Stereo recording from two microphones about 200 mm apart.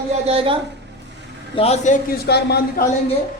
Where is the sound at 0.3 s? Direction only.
30° right (ahead or behind).